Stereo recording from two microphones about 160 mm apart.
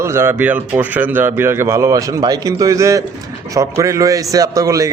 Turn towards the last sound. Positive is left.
turn(degrees=-20)  # may be behind; listen again after turning